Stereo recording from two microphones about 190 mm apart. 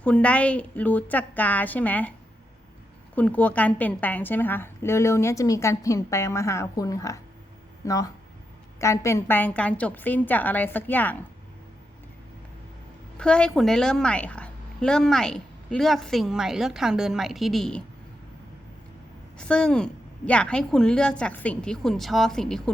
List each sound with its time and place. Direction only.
0.0 s a woman's voice: 5° left (ahead or behind)
3.2 s a woman's voice: 5° left (ahead or behind)
13.1 s a woman's voice: 5° left (ahead or behind)
19.4 s a woman's voice: 5° left (ahead or behind)